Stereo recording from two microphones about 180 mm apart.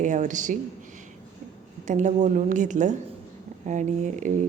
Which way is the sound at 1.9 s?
40° right (ahead or behind).